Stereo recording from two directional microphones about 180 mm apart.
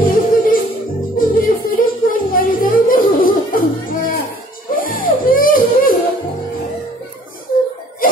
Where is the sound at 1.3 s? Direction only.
50° left (ahead or behind).